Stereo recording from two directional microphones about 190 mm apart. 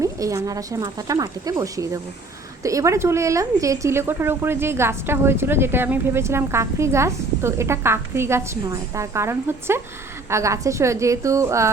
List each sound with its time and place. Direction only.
0.0 s a woman's voice: 15° right (ahead or behind)